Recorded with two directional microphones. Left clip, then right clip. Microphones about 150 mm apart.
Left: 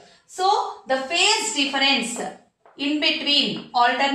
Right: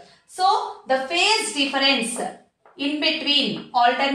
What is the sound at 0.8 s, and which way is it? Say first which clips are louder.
A woman's voice: right 2 dB; 20° right (ahead or behind).